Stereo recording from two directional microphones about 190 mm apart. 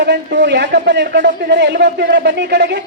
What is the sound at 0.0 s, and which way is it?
A man's voice, 65° right (ahead or behind).